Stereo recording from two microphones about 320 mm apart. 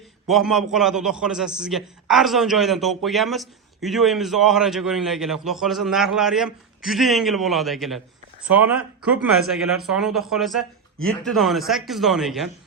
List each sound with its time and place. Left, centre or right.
0.3 s a man's voice: centre